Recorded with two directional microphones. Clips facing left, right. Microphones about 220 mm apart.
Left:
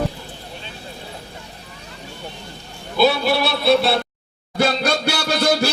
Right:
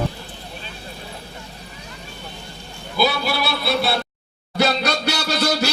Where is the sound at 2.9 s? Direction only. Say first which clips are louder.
Left 4 dB; centre (ahead or behind).